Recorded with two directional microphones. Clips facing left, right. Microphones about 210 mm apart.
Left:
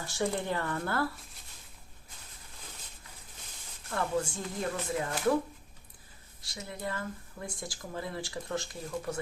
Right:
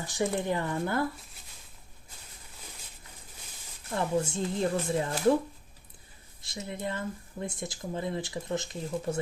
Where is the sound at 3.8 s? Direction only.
20° right (ahead or behind).